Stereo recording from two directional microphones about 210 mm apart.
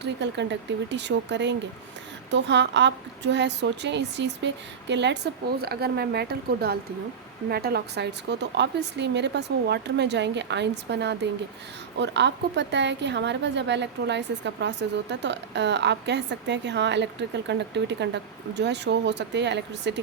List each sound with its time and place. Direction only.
0.0 s a woman's voice: 55° right (ahead or behind)